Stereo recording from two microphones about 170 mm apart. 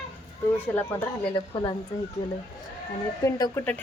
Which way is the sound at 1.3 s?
30° left (ahead or behind).